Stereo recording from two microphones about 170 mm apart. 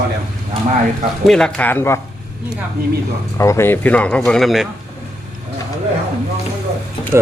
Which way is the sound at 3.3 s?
15° left (ahead or behind).